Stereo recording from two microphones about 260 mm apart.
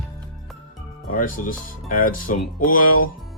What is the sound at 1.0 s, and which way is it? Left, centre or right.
Speech, left.